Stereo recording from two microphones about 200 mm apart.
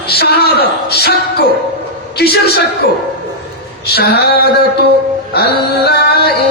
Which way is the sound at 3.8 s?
55° left (ahead or behind).